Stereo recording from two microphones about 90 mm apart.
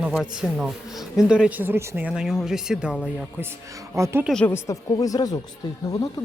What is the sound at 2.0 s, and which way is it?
Speech, 10° right (ahead or behind).